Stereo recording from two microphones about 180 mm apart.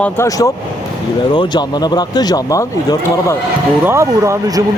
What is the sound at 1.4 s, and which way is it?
Speech, 25° left (ahead or behind).